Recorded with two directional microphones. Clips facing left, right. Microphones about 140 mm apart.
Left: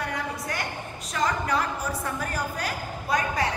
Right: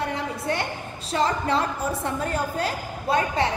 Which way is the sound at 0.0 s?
25° right (ahead or behind).